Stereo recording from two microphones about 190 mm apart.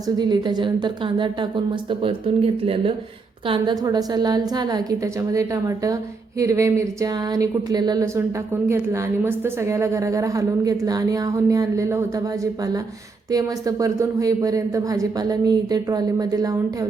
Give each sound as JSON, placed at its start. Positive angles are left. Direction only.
{"t": 0.2, "sound": "a woman's voice", "side_deg": -20}